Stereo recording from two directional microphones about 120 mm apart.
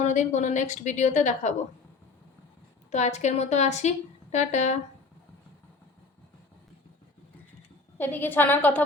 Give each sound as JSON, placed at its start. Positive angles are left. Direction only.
{"t": 0.0, "sound": "a woman's voice", "side_deg": 80}
{"t": 2.9, "sound": "a woman's voice", "side_deg": 70}
{"t": 7.9, "sound": "a woman's voice", "side_deg": 15}